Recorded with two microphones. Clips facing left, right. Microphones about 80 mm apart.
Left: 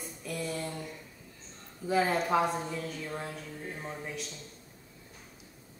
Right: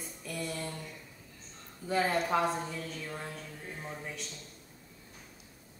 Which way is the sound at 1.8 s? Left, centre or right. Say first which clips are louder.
Left 2 dB; centre.